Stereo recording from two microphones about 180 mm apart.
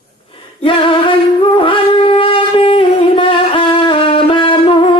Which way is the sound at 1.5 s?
30° left (ahead or behind).